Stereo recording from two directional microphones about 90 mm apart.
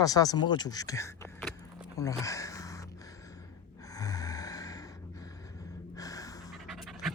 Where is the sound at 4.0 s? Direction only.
40° left (ahead or behind).